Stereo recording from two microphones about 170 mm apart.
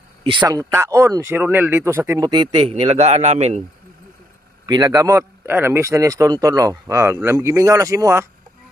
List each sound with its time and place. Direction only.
0.2 s speech: 30° right (ahead or behind)
2.5 s speech: 40° right (ahead or behind)
4.6 s speech: 20° right (ahead or behind)